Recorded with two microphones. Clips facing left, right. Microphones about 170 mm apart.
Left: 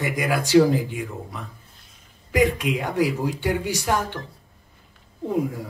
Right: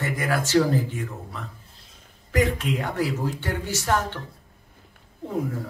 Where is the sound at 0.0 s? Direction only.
15° left (ahead or behind).